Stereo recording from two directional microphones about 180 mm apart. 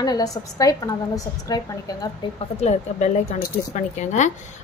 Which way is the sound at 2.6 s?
40° left (ahead or behind).